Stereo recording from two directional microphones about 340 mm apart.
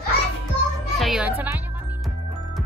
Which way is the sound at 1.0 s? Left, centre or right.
Centre.